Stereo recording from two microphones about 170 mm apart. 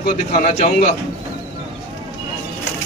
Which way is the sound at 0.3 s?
40° left (ahead or behind).